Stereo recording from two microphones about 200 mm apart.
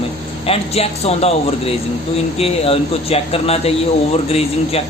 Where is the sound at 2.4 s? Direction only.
30° left (ahead or behind).